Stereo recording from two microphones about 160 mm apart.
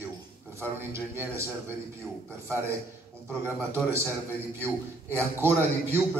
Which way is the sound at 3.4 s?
15° right (ahead or behind).